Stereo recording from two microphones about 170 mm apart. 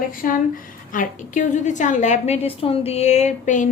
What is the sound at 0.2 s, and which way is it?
Speech, 55° left (ahead or behind).